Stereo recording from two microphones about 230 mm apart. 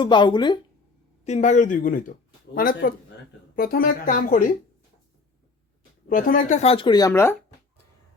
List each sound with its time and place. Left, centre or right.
0.0 s speech: centre
1.2 s speech: left
6.1 s speech: left; by 7.3 s centre